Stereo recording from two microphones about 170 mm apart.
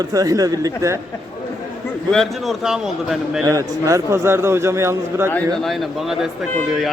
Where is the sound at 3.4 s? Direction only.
20° right (ahead or behind).